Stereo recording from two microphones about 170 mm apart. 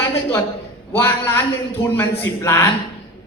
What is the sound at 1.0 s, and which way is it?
A man's voice, 15° left (ahead or behind).